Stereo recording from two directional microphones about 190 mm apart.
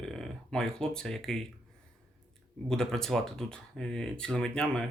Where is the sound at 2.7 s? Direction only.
5° left (ahead or behind).